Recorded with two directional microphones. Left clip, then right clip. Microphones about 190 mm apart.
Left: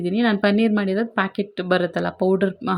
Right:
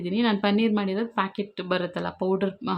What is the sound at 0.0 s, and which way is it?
Speech, 15° left (ahead or behind).